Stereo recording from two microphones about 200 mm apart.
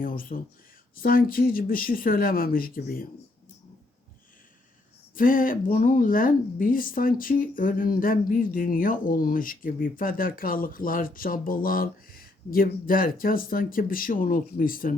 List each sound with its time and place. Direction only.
0.0 s speech: 45° left (ahead or behind)
5.1 s speech: 45° left (ahead or behind)